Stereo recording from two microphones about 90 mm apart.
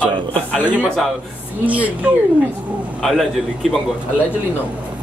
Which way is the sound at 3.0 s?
Centre (ahead or behind).